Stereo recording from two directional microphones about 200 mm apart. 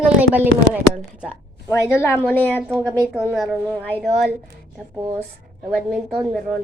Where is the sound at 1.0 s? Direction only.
5° right (ahead or behind).